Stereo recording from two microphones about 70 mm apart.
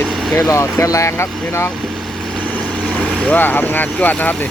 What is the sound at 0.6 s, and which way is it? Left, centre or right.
Speech, left.